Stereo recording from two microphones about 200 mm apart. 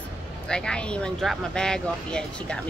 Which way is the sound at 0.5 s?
5° left (ahead or behind).